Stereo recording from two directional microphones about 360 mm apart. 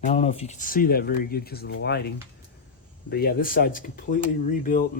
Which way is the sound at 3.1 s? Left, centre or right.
Left.